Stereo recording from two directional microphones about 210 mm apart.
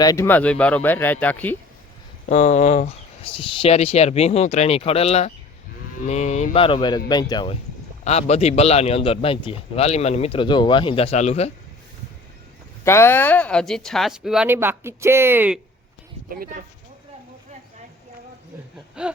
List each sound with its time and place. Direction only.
0.0 s speech: 15° left (ahead or behind)
2.3 s a man's voice: 35° left (ahead or behind)
12.8 s speech: 10° left (ahead or behind); by 15.6 s 5° right (ahead or behind)
16.3 s speech: 45° right (ahead or behind)
19.0 s a sound: 5° right (ahead or behind)